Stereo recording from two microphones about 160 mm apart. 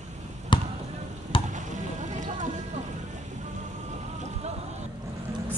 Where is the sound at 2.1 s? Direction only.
50° right (ahead or behind).